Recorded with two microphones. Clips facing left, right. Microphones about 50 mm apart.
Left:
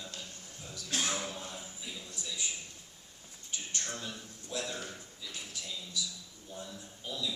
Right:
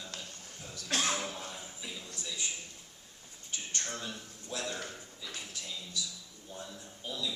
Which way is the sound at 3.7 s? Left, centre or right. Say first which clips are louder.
Right 1 dB; centre.